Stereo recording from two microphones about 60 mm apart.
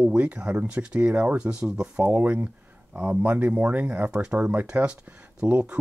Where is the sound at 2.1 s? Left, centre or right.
Right.